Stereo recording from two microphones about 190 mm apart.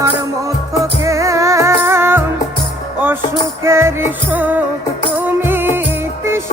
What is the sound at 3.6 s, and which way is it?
Music, 15° right (ahead or behind).